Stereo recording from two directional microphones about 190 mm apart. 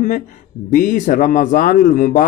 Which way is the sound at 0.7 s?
45° left (ahead or behind).